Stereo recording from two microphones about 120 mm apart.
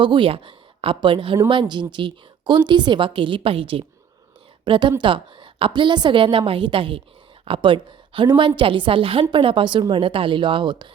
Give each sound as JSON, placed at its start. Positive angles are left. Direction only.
{"t": 0.0, "sound": "a woman's voice", "side_deg": -45}